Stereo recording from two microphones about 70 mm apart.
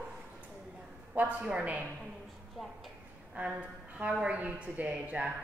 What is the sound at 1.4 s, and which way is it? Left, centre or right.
Speech, centre.